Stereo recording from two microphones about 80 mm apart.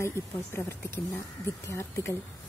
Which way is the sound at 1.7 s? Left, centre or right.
Left.